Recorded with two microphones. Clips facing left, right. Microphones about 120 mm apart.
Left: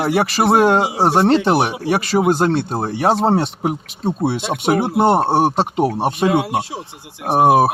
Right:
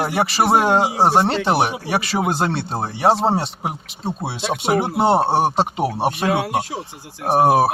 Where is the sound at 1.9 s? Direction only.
45° left (ahead or behind).